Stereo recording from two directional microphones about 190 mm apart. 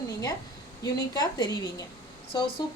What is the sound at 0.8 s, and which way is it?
Speech, 20° left (ahead or behind).